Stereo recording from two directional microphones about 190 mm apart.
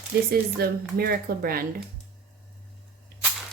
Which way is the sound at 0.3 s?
55° right (ahead or behind).